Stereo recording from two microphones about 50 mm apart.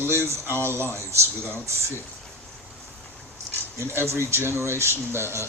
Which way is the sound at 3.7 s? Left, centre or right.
Right.